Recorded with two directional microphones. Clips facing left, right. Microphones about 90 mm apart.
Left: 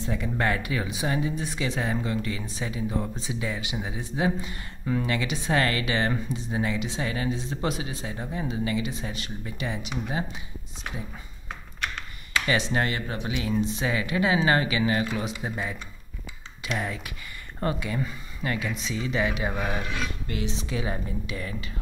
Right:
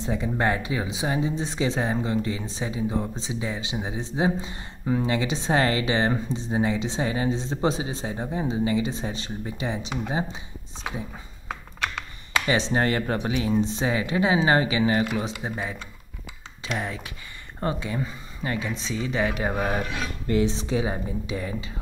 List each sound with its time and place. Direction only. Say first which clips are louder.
0.0 s speech: right 2 dB; 25° right (ahead or behind)
12.4 s speech: right 3 dB; 30° right (ahead or behind)